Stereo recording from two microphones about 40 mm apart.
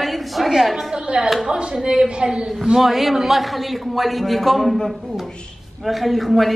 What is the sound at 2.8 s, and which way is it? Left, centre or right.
Speech, centre.